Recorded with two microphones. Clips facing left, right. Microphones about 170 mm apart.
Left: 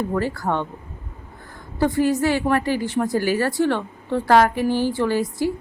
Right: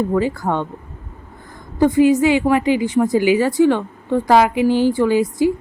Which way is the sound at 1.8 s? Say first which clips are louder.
Right 6 dB; 15° right (ahead or behind).